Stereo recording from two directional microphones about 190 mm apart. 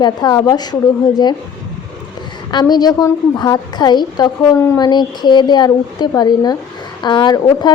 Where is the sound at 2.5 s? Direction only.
20° left (ahead or behind).